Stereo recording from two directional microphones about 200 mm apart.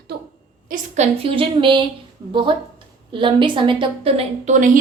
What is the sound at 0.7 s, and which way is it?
A woman's voice, 30° right (ahead or behind).